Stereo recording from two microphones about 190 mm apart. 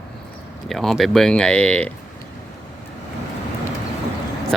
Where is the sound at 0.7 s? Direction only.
Centre (ahead or behind).